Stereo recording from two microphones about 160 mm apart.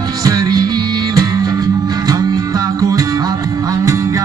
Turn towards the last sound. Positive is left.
turn(degrees=-20)  # may be behind; listen again after turning